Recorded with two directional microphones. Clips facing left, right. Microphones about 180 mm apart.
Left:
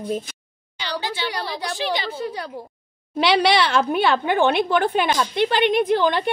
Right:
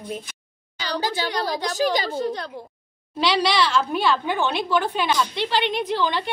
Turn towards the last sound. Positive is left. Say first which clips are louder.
# left 5 dB
turn(degrees=55)  # may be behind; listen again after turning